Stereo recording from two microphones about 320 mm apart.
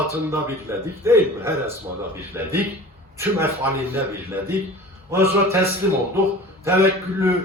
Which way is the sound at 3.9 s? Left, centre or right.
Centre.